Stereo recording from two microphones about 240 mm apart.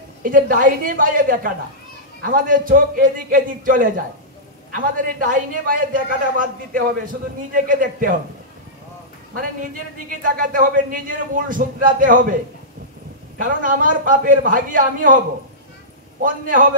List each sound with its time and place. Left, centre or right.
0.2 s a man's voice: right
10.3 s a man's voice: right
13.4 s a man's voice: right
16.2 s a man's voice: right